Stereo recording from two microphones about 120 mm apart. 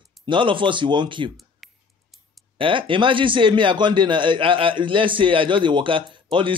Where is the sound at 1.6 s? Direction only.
Centre (ahead or behind).